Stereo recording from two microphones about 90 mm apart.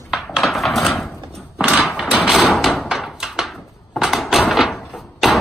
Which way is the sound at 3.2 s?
5° right (ahead or behind).